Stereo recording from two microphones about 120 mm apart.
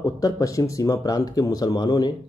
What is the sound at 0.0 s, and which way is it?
Speech, 30° left (ahead or behind).